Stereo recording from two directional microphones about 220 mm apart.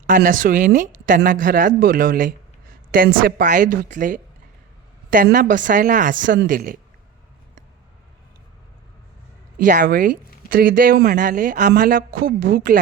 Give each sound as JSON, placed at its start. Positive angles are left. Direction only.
{"t": 0.1, "sound": "speech", "side_deg": -35}
{"t": 9.6, "sound": "speech", "side_deg": -35}